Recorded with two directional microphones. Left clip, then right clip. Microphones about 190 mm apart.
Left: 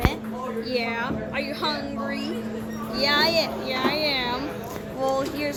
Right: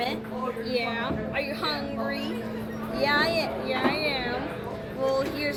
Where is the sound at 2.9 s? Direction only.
50° left (ahead or behind).